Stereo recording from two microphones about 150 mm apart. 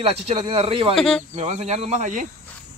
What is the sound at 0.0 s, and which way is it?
Speech, 40° right (ahead or behind).